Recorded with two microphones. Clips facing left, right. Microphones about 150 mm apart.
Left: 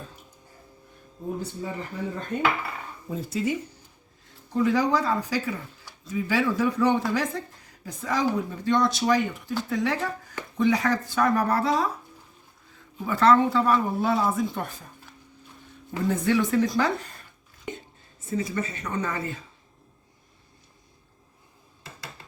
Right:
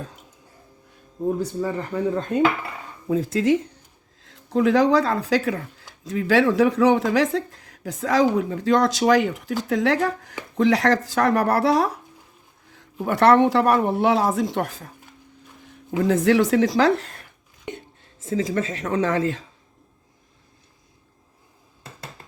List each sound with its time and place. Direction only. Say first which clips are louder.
1.9 s speech: right 9 dB; 70° right (ahead or behind)
3.1 s speech: right 8 dB; 90° right
6.1 s speech: right 6 dB; 90° right; by 10.3 s 70° right (ahead or behind)
10.6 s speech: right 4 dB; 90° right